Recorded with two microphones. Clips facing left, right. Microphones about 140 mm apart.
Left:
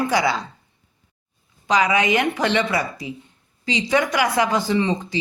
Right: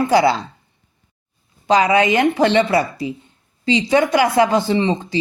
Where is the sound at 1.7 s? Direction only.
30° right (ahead or behind).